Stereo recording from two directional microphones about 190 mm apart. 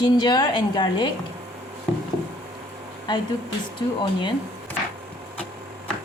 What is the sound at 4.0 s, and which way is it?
Speech, 25° left (ahead or behind).